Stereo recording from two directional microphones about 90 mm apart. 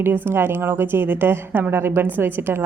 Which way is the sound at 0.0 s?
25° right (ahead or behind).